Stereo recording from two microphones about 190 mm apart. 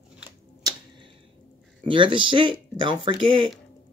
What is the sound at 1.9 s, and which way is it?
Speech, 25° right (ahead or behind).